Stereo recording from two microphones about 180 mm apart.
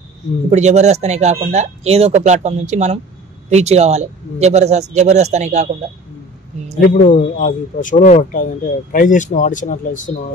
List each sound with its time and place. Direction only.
0.5 s speech: 40° right (ahead or behind)
6.8 s speech: 45° left (ahead or behind)